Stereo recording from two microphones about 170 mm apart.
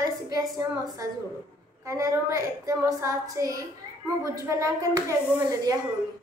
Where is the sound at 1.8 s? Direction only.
20° right (ahead or behind).